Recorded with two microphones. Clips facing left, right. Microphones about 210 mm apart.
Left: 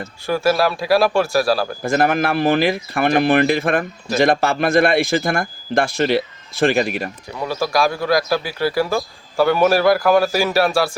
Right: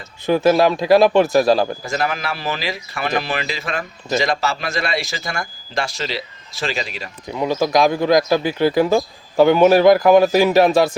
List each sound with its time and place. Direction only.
0.3 s speech: 20° right (ahead or behind)
1.8 s speech: 55° left (ahead or behind)
7.3 s speech: 20° right (ahead or behind)